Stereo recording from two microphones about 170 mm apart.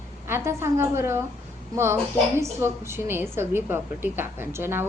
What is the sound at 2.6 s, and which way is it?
A woman's voice, 15° right (ahead or behind).